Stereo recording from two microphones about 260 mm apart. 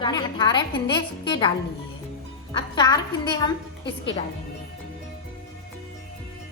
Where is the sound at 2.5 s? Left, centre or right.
Centre.